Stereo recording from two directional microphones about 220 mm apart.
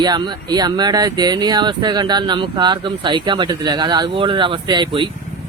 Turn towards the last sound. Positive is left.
turn(degrees=-20)  # may be behind; listen again after turning